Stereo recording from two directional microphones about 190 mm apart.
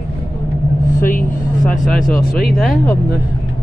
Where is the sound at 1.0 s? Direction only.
45° left (ahead or behind).